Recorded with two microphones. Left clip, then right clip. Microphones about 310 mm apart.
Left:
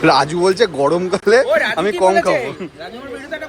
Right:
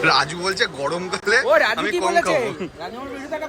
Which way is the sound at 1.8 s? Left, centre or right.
Centre.